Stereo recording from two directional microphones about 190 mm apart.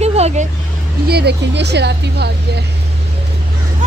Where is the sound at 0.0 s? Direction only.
35° right (ahead or behind).